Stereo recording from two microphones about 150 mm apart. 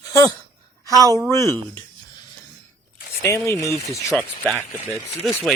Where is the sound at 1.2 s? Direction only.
15° left (ahead or behind).